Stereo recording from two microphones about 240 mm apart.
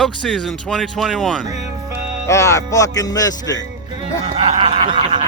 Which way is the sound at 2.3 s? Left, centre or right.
Centre.